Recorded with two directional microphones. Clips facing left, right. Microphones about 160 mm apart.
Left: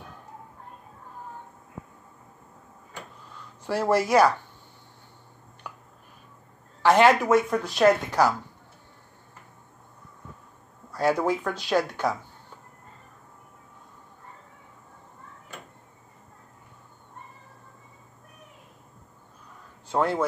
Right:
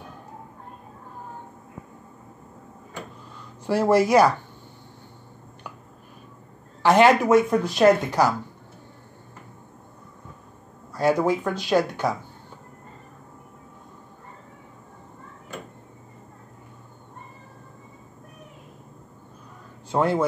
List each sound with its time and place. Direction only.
3.6 s speech: 15° right (ahead or behind)
6.8 s speech: 15° right (ahead or behind)
11.0 s speech: 15° right (ahead or behind)
19.9 s speech: 15° right (ahead or behind)